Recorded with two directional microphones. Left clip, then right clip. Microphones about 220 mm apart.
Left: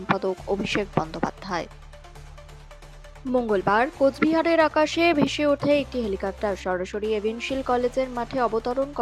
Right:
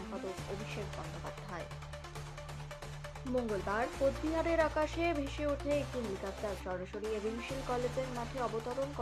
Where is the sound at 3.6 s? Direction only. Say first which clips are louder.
Left 13 dB; 45° left (ahead or behind).